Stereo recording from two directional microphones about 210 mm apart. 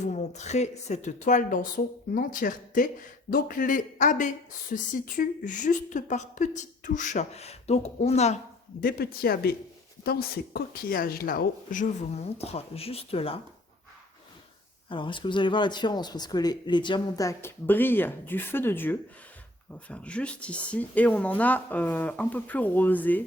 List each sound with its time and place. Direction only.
0.0 s speech: 35° left (ahead or behind)
8.8 s speech: 45° left (ahead or behind); by 13.4 s 25° left (ahead or behind)
14.8 s speech: 25° left (ahead or behind)